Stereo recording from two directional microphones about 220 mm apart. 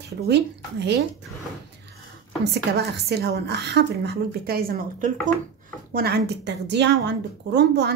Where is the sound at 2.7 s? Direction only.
50° right (ahead or behind).